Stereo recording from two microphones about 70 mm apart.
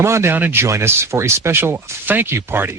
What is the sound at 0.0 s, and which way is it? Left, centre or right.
Speech, right.